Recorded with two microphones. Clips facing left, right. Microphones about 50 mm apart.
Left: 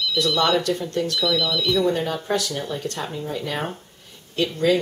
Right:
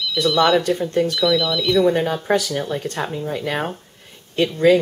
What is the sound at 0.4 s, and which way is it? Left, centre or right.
Speech, centre.